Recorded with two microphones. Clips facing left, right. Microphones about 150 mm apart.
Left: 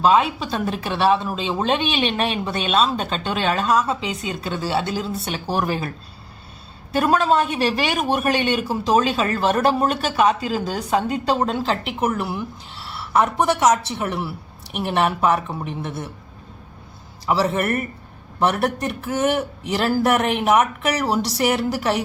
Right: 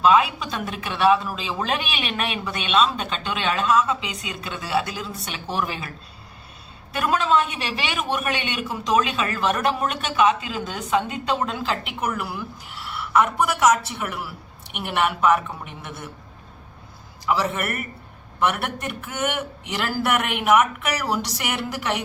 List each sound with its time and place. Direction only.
0.0 s a woman's voice: 30° left (ahead or behind)
6.9 s a woman's voice: 35° left (ahead or behind)
17.2 s a woman's voice: 30° left (ahead or behind)